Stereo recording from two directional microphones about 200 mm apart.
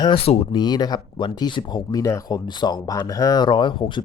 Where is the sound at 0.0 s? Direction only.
30° left (ahead or behind).